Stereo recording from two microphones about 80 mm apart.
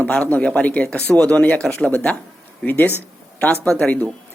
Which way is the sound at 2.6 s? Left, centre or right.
Left.